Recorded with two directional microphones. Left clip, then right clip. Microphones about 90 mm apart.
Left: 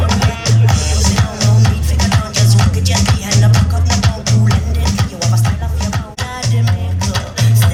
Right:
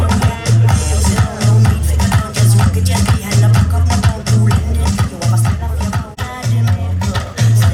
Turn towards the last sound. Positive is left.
turn(degrees=25)  # may be behind; listen again after turning